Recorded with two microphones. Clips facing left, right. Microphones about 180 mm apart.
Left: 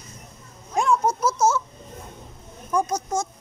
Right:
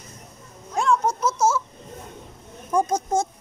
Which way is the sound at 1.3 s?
25° right (ahead or behind).